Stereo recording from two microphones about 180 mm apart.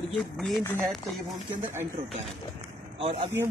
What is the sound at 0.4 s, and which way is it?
Speech, 10° left (ahead or behind).